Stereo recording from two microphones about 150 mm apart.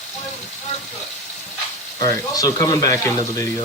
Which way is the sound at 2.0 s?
25° left (ahead or behind).